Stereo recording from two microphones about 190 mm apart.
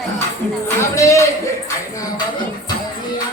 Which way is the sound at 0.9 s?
15° left (ahead or behind).